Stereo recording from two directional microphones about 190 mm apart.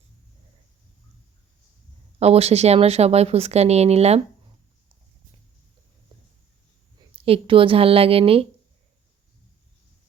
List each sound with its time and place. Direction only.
2.1 s speech: 35° right (ahead or behind)
7.2 s a woman's voice: 30° right (ahead or behind)